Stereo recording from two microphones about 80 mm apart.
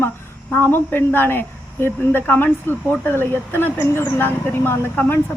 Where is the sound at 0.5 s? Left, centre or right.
Left.